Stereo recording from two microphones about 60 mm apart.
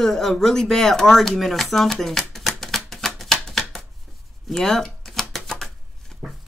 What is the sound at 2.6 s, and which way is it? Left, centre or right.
Chopping, centre.